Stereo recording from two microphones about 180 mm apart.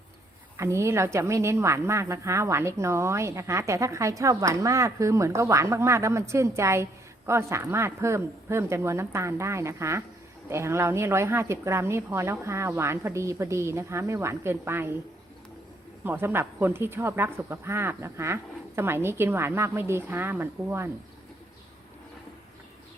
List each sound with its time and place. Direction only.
0.5 s a woman's voice: 15° right (ahead or behind)
16.0 s a woman's voice: 10° right (ahead or behind)